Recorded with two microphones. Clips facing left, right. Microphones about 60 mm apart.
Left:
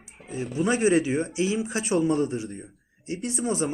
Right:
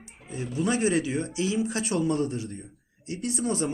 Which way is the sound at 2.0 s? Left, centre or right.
Centre.